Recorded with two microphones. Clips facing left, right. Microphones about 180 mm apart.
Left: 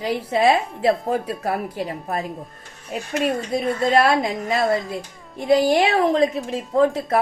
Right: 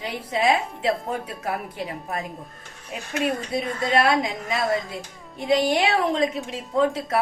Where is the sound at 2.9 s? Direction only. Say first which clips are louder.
Left 3 dB; 40° left (ahead or behind).